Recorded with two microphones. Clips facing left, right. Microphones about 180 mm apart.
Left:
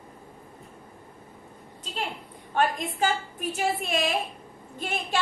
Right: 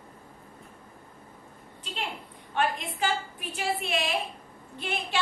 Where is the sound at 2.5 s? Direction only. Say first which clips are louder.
Left 3 dB; 45° left (ahead or behind).